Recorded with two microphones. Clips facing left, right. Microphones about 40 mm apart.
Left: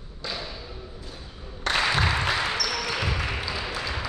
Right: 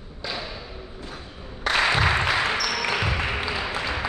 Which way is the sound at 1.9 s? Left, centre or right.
Right.